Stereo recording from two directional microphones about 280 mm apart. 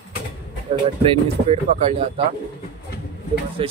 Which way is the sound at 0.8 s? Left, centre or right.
Right.